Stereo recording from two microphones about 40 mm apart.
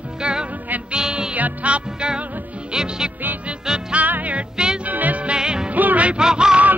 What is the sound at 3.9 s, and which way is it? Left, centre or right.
Music, right.